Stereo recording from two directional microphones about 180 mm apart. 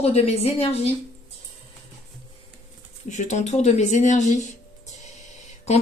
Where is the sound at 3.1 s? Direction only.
40° left (ahead or behind).